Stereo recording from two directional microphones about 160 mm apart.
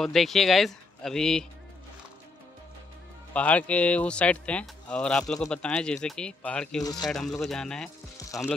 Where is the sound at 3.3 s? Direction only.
10° left (ahead or behind).